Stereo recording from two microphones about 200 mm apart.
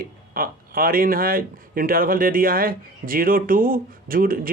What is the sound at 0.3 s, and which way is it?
Speech, 45° right (ahead or behind).